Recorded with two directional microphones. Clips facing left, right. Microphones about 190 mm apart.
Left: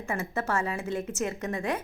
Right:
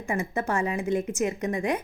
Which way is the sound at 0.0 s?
15° right (ahead or behind).